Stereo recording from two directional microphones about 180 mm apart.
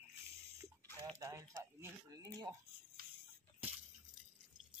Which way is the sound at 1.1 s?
15° right (ahead or behind).